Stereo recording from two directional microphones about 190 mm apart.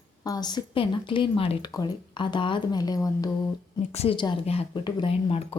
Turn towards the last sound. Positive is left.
turn(degrees=30)  # may be behind; listen again after turning